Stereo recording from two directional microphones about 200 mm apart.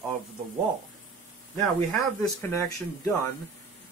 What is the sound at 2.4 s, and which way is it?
Speech, 10° left (ahead or behind).